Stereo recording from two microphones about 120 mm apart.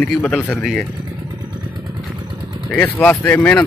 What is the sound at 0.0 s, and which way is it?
Speech, 10° left (ahead or behind).